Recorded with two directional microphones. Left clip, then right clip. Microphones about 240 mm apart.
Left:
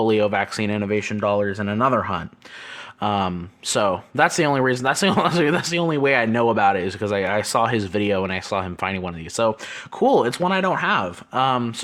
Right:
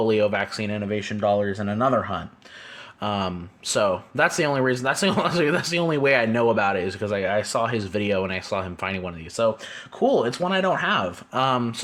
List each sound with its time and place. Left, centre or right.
0.0 s speech: left